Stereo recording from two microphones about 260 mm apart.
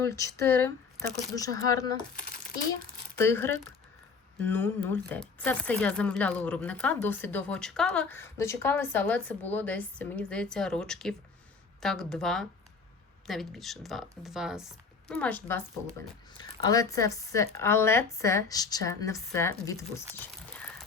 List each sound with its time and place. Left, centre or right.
0.0 s speech: centre
2.1 s speech: left
3.2 s speech: centre